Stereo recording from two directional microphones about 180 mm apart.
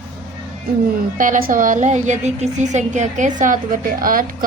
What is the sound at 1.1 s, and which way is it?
A woman's voice, 45° right (ahead or behind).